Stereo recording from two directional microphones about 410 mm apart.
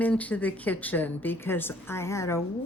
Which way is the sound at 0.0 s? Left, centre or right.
Centre.